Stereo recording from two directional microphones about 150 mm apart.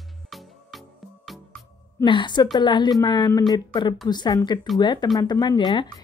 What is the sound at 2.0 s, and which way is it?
A woman's voice, 30° left (ahead or behind).